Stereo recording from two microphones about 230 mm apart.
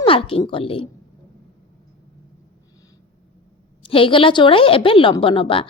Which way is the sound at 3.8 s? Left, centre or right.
Left.